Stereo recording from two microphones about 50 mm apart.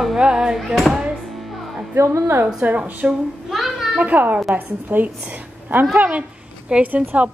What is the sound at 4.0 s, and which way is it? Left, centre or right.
A woman's voice, right.